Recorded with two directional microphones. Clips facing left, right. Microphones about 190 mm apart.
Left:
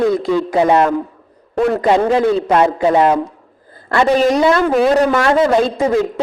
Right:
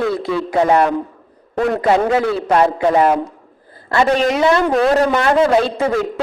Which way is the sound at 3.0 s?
10° right (ahead or behind).